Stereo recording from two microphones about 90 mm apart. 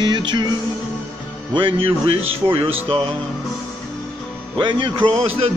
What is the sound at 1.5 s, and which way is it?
Speech, 75° right (ahead or behind).